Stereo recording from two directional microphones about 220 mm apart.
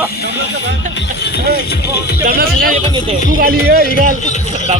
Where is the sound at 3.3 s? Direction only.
40° right (ahead or behind).